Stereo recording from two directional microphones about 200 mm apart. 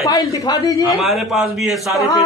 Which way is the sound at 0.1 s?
20° left (ahead or behind).